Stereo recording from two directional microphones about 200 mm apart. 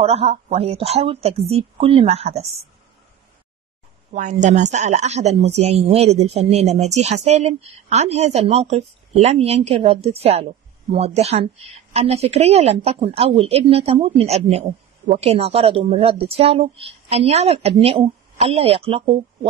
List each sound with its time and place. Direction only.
0.0 s a woman's voice: 30° right (ahead or behind)
4.1 s a woman's voice: 35° right (ahead or behind)